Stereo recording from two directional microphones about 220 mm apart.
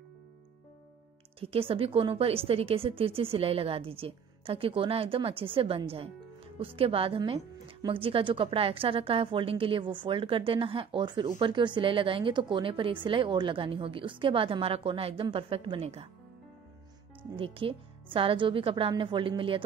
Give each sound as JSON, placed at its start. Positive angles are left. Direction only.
{"t": 1.4, "sound": "speech", "side_deg": -25}
{"t": 17.4, "sound": "speech", "side_deg": -25}